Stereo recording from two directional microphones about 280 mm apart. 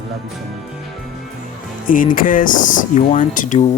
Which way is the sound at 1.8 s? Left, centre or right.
Left.